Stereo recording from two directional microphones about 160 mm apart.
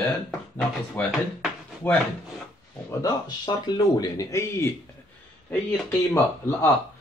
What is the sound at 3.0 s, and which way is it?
Speech, 25° left (ahead or behind).